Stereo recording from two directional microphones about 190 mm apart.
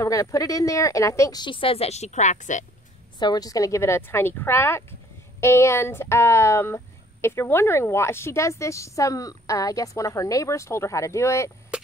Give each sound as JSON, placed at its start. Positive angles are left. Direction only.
{"t": 0.0, "sound": "a woman's voice", "side_deg": 15}
{"t": 3.2, "sound": "speech", "side_deg": 20}
{"t": 11.7, "sound": "a sound", "side_deg": -5}